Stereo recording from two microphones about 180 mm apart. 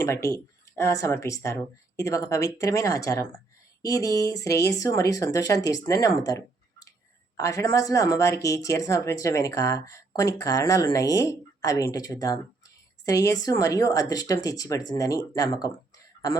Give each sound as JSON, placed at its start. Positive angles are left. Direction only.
{"t": 0.0, "sound": "speech", "side_deg": 15}